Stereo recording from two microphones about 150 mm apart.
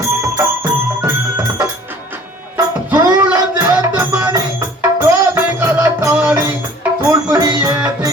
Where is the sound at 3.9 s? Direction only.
25° right (ahead or behind).